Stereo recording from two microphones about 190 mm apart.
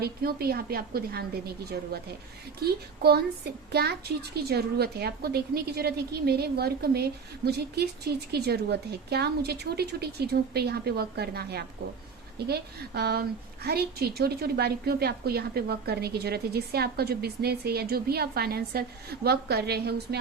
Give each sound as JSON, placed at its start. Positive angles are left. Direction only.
{"t": 0.0, "sound": "a woman's voice", "side_deg": -55}
{"t": 2.6, "sound": "a woman's voice", "side_deg": -55}